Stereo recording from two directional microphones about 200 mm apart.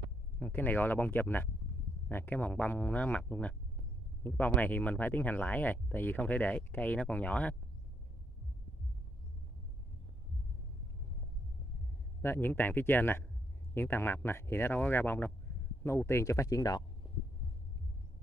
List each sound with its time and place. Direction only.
0.4 s speech: 10° left (ahead or behind)
12.2 s speech: 10° left (ahead or behind)
17.0 s heart sounds: 25° left (ahead or behind)